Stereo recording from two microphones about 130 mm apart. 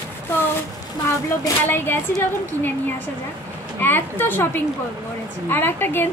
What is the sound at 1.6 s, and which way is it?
Speech, 15° left (ahead or behind).